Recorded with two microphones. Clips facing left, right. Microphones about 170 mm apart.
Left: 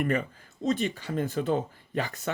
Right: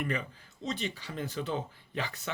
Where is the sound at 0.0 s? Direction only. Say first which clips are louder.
Left 7 dB; 50° left (ahead or behind).